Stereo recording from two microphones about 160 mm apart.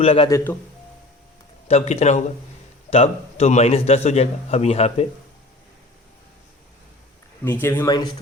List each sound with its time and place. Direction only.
0.0 s a man's voice: 35° left (ahead or behind)
0.3 s speech: 20° left (ahead or behind)
1.6 s a man's voice: 45° left (ahead or behind)
7.4 s speech: 15° left (ahead or behind)
7.9 s speech: 25° left (ahead or behind)